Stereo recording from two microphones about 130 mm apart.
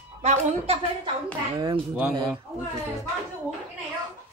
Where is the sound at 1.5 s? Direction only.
35° right (ahead or behind).